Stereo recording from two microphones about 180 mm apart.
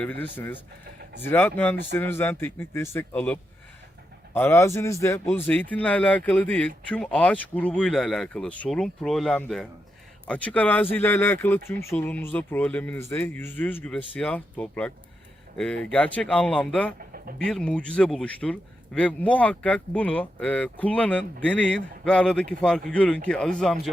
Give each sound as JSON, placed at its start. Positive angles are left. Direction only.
{"t": 0.0, "sound": "a man's voice", "side_deg": 10}
{"t": 4.4, "sound": "a man's voice", "side_deg": 15}